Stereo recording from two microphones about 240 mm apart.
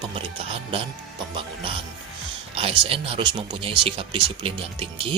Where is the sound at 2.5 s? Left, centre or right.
Right.